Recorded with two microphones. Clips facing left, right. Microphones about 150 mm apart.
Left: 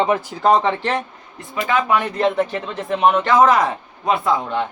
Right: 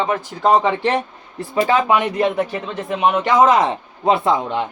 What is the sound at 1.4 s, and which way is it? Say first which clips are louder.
Speech: right 4 dB; 30° right (ahead or behind).